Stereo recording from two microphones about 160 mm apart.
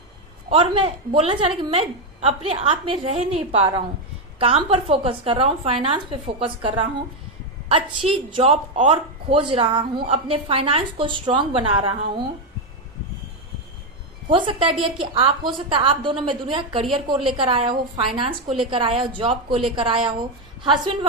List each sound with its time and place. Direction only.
0.5 s a woman's voice: 35° right (ahead or behind)
7.7 s a woman's voice: 35° right (ahead or behind)
14.3 s a woman's voice: 30° right (ahead or behind)